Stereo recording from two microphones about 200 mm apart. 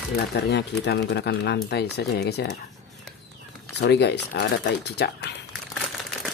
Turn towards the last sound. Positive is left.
turn(degrees=55)  # may be behind; listen again after turning